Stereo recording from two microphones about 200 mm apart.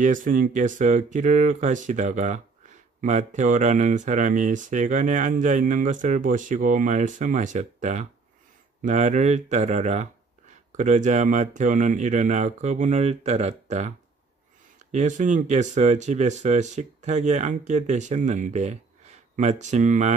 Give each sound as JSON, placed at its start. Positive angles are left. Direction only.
{"t": 0.0, "sound": "speech", "side_deg": -40}